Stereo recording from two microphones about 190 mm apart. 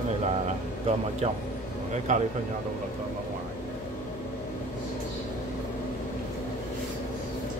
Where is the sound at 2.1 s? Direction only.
40° right (ahead or behind).